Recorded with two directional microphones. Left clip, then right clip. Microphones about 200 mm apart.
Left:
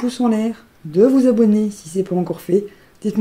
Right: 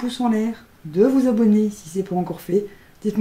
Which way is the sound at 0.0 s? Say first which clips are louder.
Left 3 dB; 25° left (ahead or behind).